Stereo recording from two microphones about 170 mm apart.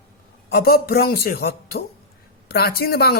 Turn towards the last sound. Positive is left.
turn(degrees=65)  # may be behind; listen again after turning